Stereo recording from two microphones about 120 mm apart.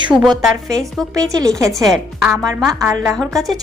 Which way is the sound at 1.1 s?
25° right (ahead or behind).